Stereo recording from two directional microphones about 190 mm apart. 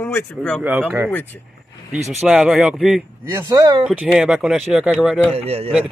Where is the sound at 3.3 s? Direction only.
15° right (ahead or behind).